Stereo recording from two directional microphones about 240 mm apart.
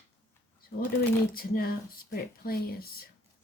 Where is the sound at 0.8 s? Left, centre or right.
Left.